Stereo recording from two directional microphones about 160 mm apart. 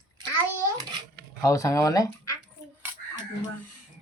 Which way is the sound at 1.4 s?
20° left (ahead or behind).